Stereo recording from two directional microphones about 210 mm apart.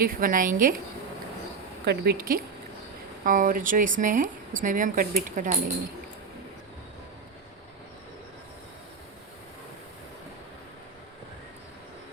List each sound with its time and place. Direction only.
0.0 s speech: 40° right (ahead or behind)
1.8 s speech: 50° right (ahead or behind)